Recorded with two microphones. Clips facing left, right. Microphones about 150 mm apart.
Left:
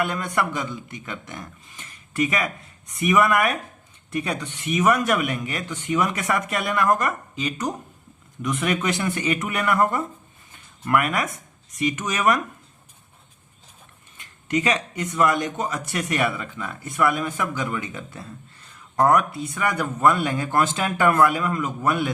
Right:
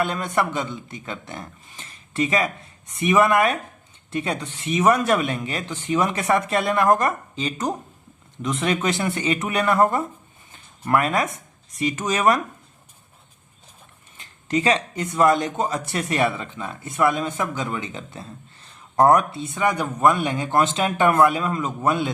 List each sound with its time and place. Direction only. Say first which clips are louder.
0.0 s speech: right 2 dB; 25° right (ahead or behind)
10.5 s a sound: right 1 dB; 30° right (ahead or behind)
11.8 s speech: right 2 dB; 30° right (ahead or behind)
14.2 s speech: right 1 dB; 30° right (ahead or behind)